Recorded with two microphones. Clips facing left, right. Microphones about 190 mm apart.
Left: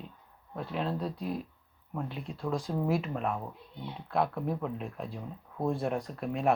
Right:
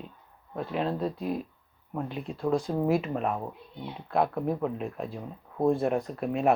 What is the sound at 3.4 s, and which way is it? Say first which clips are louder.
Speech: right 4 dB; 25° right (ahead or behind).